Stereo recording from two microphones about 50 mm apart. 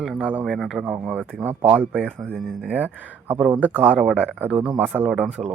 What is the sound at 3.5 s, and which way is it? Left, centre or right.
Speech, right.